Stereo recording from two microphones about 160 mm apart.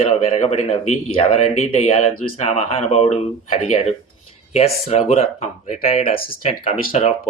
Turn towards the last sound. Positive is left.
turn(degrees=40)  # may be behind; listen again after turning